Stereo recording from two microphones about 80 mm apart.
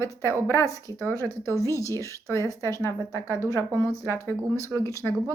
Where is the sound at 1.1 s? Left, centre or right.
Right.